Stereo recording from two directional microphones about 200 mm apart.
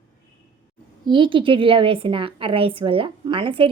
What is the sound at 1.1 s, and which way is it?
A woman's voice, 25° right (ahead or behind).